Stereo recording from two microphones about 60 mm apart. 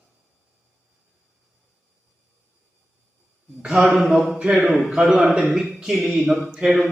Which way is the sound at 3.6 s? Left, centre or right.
Centre.